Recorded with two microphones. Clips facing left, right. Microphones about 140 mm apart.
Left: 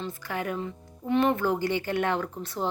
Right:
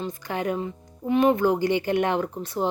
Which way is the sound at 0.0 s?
20° right (ahead or behind).